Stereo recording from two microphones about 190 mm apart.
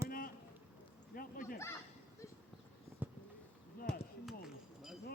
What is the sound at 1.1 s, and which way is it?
Speech, 50° left (ahead or behind).